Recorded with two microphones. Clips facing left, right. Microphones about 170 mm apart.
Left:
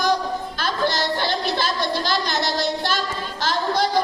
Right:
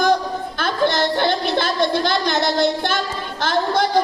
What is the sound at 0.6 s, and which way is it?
A child's voice, 55° right (ahead or behind).